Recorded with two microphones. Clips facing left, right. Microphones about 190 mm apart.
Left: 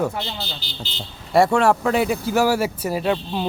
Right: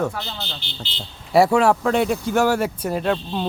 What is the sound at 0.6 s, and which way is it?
Speech, 40° left (ahead or behind).